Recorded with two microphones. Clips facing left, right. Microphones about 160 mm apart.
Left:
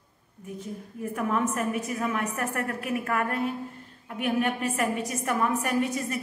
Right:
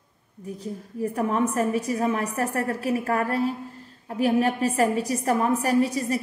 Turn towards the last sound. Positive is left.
turn(degrees=-35)  # may be behind; listen again after turning